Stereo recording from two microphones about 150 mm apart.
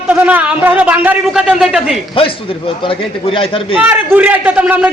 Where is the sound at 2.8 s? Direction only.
35° left (ahead or behind).